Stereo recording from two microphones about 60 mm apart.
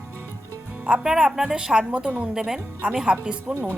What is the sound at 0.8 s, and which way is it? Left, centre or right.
Speech, centre.